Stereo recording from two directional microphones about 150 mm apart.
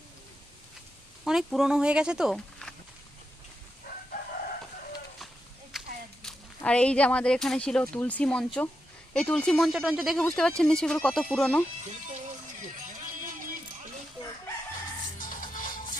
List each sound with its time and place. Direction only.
1.2 s speech: centre (ahead or behind)
5.7 s a sound: centre (ahead or behind)
6.2 s speech: 10° left (ahead or behind)
13.2 s music: 65° right (ahead or behind)
15.2 s music: 65° left (ahead or behind)